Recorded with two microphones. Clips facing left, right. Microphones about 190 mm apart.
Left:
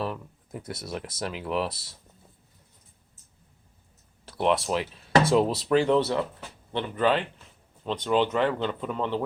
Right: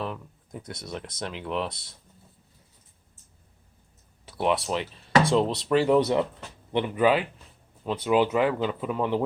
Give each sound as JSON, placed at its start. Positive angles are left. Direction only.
{"t": 0.0, "sound": "speech", "side_deg": 5}
{"t": 4.3, "sound": "speech", "side_deg": 0}
{"t": 6.0, "sound": "speech", "side_deg": -15}